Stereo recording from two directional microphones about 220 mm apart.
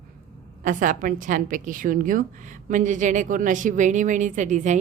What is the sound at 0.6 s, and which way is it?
A woman's voice, 35° right (ahead or behind).